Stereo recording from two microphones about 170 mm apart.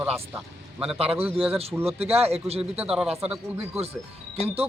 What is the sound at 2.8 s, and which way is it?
Speech, 5° right (ahead or behind).